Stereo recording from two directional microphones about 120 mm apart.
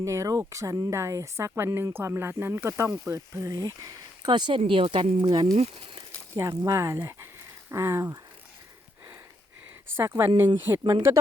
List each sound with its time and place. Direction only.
0.0 s speech: 25° right (ahead or behind); by 5.0 s 45° right (ahead or behind)
5.2 s speech: 35° right (ahead or behind)
9.9 s speech: 20° right (ahead or behind)